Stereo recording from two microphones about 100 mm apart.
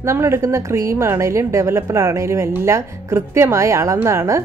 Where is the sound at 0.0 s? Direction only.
30° right (ahead or behind).